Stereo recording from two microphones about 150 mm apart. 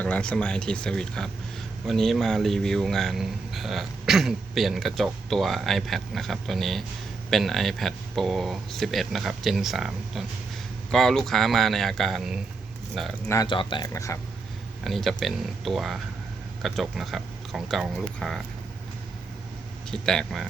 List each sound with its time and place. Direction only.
0.0 s speech: 5° left (ahead or behind)
13.2 s speech: 20° left (ahead or behind)
13.5 s speech: 35° left (ahead or behind)
13.9 s speech: 20° left (ahead or behind)
14.8 s speech: centre (ahead or behind)
19.9 s speech: 5° left (ahead or behind)